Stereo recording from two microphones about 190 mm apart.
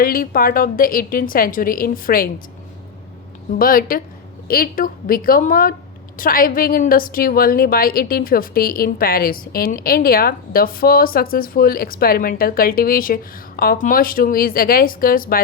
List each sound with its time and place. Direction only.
0.0 s a woman's voice: 50° left (ahead or behind)
3.5 s a woman's voice: 50° left (ahead or behind)